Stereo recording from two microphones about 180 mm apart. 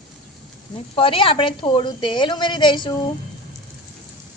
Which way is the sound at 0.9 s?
30° left (ahead or behind).